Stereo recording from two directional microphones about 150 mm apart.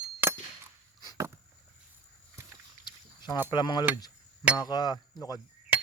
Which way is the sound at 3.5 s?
30° left (ahead or behind).